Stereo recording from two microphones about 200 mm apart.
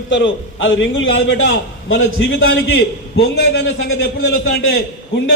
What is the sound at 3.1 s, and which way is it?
Speech, 60° left (ahead or behind).